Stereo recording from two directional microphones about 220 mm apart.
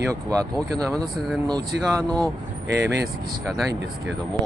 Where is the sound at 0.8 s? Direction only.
Centre (ahead or behind).